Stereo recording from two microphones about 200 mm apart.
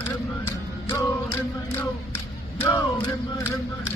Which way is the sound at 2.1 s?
10° left (ahead or behind).